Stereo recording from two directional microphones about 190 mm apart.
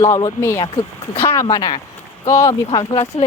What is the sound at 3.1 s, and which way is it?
Speech, 35° left (ahead or behind).